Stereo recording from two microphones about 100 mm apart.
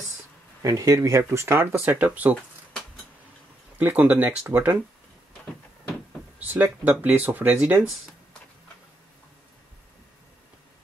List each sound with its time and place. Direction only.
0.6 s speech: 35° right (ahead or behind); by 2.3 s 15° right (ahead or behind)
3.7 s speech: 20° right (ahead or behind)
6.4 s speech: 15° right (ahead or behind)